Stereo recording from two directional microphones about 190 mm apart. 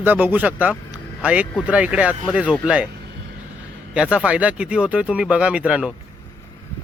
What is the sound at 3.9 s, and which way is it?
Speech, 5° right (ahead or behind).